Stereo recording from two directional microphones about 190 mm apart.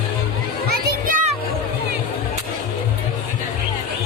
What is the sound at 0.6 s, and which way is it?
Children playing, 45° right (ahead or behind).